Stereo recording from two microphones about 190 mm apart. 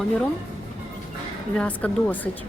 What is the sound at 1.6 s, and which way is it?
Speech, 5° left (ahead or behind).